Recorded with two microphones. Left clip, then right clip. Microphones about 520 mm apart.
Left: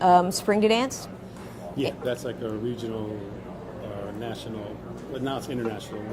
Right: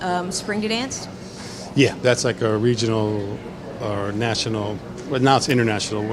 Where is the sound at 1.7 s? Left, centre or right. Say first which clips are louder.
Right 11 dB; right.